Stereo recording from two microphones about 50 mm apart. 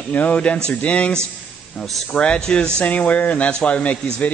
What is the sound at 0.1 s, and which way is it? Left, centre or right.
Speech, left.